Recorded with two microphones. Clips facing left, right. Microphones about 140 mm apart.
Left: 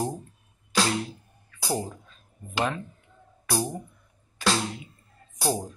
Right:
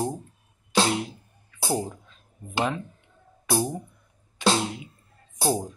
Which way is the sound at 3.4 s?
25° right (ahead or behind).